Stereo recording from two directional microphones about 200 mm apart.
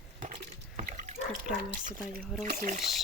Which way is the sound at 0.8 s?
40° right (ahead or behind).